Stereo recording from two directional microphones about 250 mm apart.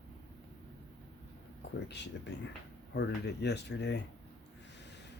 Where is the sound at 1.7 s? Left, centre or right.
Left.